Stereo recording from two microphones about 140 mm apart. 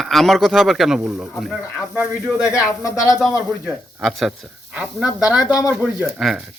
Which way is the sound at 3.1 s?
Centre (ahead or behind).